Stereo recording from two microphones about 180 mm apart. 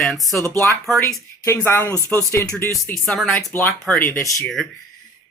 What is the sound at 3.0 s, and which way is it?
Speech, centre (ahead or behind).